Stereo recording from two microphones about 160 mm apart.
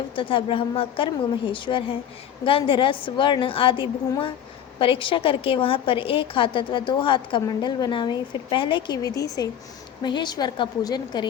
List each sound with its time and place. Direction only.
0.2 s a woman's voice: 35° left (ahead or behind)